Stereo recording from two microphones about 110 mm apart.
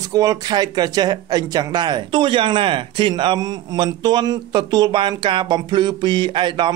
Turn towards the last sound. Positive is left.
turn(degrees=-45)  # may be behind; listen again after turning